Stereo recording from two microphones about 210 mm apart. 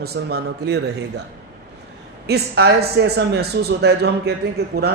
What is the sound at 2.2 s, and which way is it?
Speech, 50° right (ahead or behind).